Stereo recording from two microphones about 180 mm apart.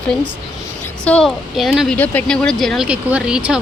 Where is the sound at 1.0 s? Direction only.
5° left (ahead or behind).